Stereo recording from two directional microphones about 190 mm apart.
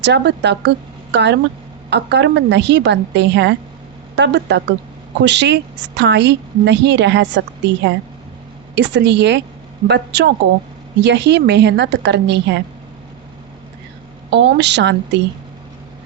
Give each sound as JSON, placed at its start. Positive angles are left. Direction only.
{"t": 0.0, "sound": "a woman's voice", "side_deg": -65}
{"t": 14.3, "sound": "a woman's voice", "side_deg": -65}